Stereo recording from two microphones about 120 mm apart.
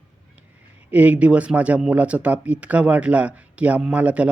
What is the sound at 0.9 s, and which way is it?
Speech, 10° right (ahead or behind).